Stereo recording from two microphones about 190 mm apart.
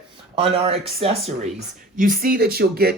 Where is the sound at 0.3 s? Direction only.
30° right (ahead or behind).